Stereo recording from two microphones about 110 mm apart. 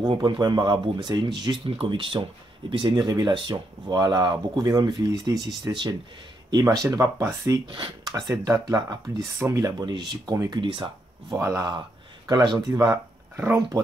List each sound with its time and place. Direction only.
0.0 s speech: 45° right (ahead or behind)
5.6 s speech: 45° right (ahead or behind)
6.7 s speech: 30° right (ahead or behind)
7.6 s speech: 45° right (ahead or behind)
10.5 s speech: 50° right (ahead or behind)
11.3 s speech: 25° right (ahead or behind)
12.3 s speech: 40° right (ahead or behind); by 13.7 s 25° right (ahead or behind)